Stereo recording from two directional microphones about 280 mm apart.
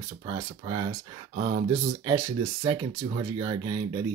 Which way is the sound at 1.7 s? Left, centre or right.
Centre.